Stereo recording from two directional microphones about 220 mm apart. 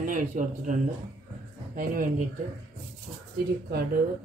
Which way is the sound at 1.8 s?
40° right (ahead or behind).